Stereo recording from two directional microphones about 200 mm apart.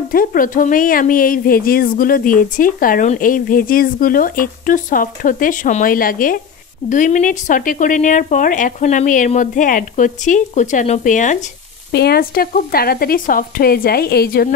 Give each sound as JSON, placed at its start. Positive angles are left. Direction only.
{"t": 0.1, "sound": "speech", "side_deg": 45}
{"t": 11.9, "sound": "speech", "side_deg": 50}